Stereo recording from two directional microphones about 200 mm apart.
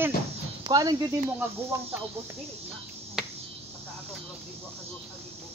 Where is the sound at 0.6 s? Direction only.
20° right (ahead or behind).